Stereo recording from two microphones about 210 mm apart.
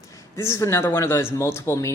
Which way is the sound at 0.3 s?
15° left (ahead or behind).